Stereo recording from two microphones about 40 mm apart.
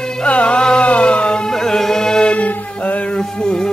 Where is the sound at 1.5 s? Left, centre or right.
Centre.